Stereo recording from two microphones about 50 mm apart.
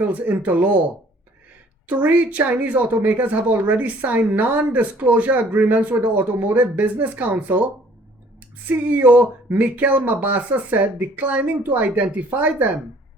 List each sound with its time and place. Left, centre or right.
0.0 s speech: right
1.9 s speech: right
8.7 s speech: right